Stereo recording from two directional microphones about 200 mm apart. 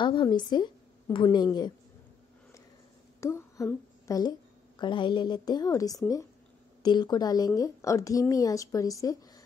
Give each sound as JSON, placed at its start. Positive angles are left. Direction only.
{"t": 0.0, "sound": "a woman's voice", "side_deg": 25}
{"t": 3.2, "sound": "a woman's voice", "side_deg": 15}